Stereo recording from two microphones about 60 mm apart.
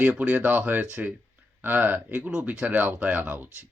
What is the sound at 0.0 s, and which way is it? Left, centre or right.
Speech, right.